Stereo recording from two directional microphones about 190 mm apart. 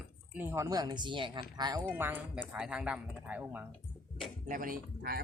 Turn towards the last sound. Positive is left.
turn(degrees=-50)  # may be behind; listen again after turning